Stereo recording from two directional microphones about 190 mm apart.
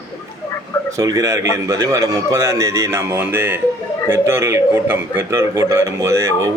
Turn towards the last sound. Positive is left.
turn(degrees=-15)  # may be behind; listen again after turning